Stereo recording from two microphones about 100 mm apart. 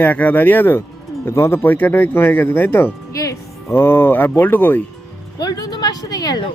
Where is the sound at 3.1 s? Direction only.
35° left (ahead or behind).